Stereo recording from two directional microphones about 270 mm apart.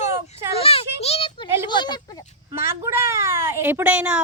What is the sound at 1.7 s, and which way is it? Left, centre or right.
Speech, centre.